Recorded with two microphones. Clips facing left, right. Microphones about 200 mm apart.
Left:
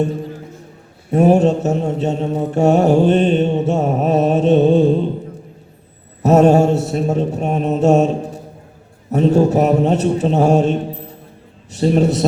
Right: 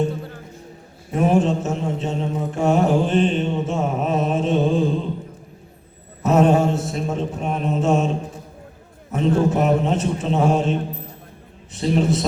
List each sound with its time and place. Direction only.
1.1 s mantra: 40° left (ahead or behind)
6.2 s mantra: 40° left (ahead or behind)
9.1 s mantra: 40° left (ahead or behind)